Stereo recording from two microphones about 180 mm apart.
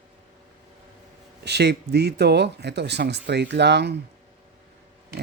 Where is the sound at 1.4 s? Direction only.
70° right (ahead or behind).